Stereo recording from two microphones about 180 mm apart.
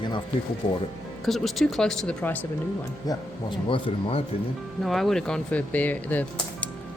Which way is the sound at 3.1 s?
20° left (ahead or behind).